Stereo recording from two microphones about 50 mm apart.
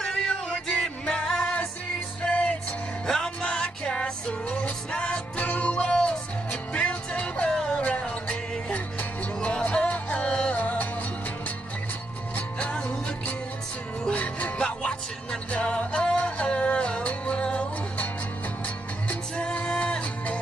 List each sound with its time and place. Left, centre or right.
0.0 s music: centre
5.4 s music: left
7.4 s music: centre
7.8 s music: left
12.4 s music: left
14.1 s music: left
19.0 s music: left